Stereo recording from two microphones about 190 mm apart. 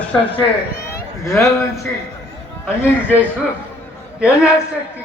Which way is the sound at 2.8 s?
10° left (ahead or behind).